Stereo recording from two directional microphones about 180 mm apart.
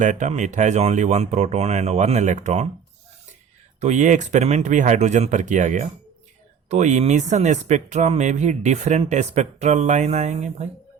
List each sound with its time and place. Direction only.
0.0 s speech: 45° right (ahead or behind)
3.8 s speech: 40° right (ahead or behind)